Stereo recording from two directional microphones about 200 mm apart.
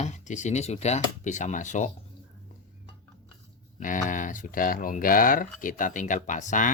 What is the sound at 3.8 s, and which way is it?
Speech, 40° left (ahead or behind).